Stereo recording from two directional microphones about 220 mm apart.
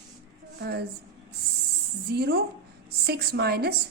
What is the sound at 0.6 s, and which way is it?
Speech, 45° right (ahead or behind).